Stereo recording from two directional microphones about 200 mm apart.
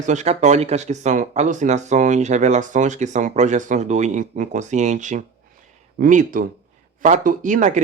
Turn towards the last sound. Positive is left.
turn(degrees=-40)  # may be behind; listen again after turning